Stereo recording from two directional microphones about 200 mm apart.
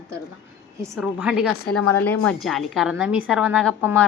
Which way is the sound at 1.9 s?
10° left (ahead or behind).